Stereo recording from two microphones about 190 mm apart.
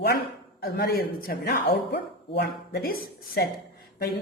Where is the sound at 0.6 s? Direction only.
55° left (ahead or behind).